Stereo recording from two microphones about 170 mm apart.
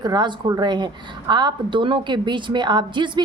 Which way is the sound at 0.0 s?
25° right (ahead or behind).